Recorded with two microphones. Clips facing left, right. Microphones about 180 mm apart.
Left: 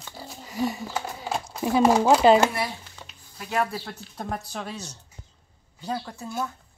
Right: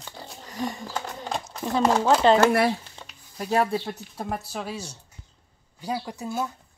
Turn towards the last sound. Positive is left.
turn(degrees=-15)  # may be behind; listen again after turning